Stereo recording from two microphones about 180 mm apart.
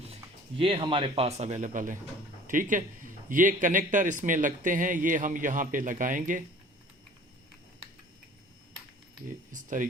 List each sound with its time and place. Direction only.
0.6 s a man's voice: 30° right (ahead or behind); by 6.4 s 45° right (ahead or behind)
9.5 s a man's voice: 45° right (ahead or behind)